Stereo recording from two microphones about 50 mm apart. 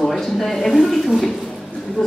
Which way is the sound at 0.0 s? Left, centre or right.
Centre.